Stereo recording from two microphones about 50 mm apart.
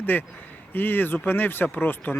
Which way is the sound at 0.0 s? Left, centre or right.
Left.